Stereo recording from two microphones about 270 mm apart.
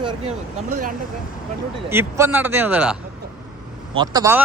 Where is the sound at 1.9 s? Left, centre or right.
Centre.